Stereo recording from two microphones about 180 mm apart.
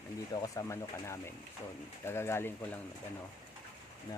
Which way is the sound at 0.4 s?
15° left (ahead or behind).